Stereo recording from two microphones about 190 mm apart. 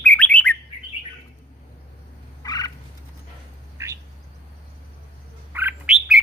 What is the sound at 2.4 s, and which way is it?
Turkey, 20° left (ahead or behind).